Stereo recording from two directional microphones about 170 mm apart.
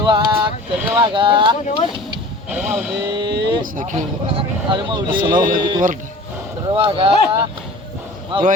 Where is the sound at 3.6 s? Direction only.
50° right (ahead or behind).